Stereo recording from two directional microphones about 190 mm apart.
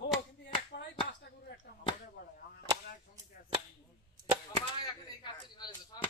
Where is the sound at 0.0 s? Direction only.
65° left (ahead or behind).